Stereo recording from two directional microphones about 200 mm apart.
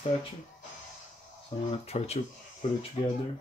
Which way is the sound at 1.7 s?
35° left (ahead or behind).